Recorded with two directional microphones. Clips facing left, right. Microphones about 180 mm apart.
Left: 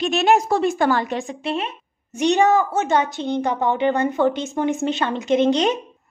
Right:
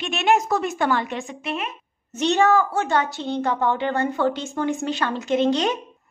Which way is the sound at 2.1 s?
15° left (ahead or behind).